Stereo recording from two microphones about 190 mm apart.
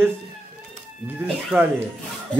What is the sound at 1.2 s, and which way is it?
Speech, 5° right (ahead or behind).